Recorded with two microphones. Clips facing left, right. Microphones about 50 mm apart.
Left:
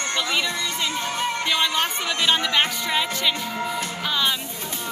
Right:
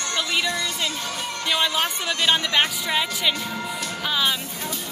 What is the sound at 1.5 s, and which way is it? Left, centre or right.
Speech, centre.